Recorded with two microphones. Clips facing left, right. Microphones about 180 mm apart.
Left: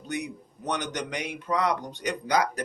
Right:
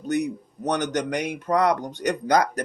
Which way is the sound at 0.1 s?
45° right (ahead or behind).